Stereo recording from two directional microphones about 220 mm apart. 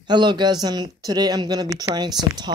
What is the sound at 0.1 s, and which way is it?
Speech, 20° right (ahead or behind).